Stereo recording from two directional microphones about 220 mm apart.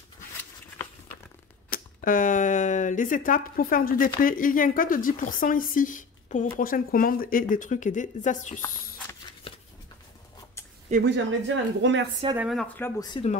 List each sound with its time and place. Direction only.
1.7 s speech: 40° left (ahead or behind)
10.9 s speech: 30° right (ahead or behind)
11.4 s speech: 55° right (ahead or behind)
12.4 s speech: centre (ahead or behind)
13.1 s speech: 30° left (ahead or behind)